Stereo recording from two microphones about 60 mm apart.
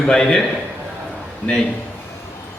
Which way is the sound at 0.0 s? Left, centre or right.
Centre.